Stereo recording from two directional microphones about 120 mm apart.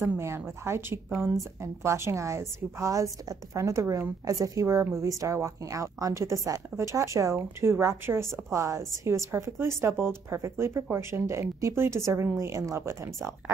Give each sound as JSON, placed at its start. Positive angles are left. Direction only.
{"t": 0.0, "sound": "a woman's voice", "side_deg": -20}